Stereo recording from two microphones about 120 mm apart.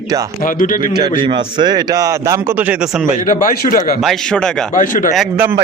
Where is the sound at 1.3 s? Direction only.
40° right (ahead or behind).